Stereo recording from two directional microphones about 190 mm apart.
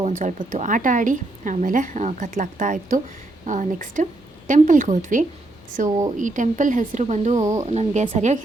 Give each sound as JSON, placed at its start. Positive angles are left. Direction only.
{"t": 0.0, "sound": "a woman's voice", "side_deg": -45}